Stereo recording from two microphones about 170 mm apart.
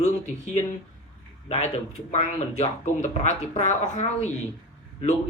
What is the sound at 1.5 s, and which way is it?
Speech, 40° left (ahead or behind).